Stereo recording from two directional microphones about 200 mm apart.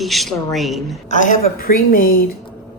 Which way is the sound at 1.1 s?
40° left (ahead or behind).